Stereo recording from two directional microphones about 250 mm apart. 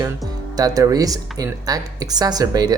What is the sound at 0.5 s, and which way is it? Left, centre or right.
Speech, centre.